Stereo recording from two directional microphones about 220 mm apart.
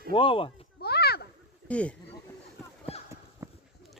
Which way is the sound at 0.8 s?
45° left (ahead or behind).